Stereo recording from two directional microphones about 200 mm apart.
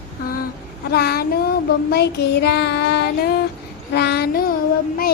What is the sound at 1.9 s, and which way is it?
Child singing, 55° left (ahead or behind).